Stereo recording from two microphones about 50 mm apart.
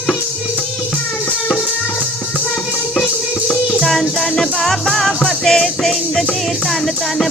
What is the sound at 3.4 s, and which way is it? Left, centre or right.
Music, centre.